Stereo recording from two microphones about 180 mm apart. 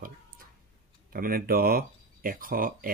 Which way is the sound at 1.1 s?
55° right (ahead or behind).